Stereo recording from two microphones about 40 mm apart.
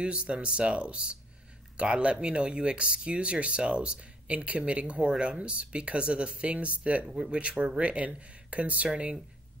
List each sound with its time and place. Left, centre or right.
0.0 s speech: right